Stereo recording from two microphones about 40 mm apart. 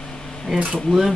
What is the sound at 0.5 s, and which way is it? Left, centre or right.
Speech, right.